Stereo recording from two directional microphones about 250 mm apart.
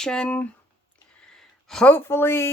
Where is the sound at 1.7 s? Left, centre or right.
Centre.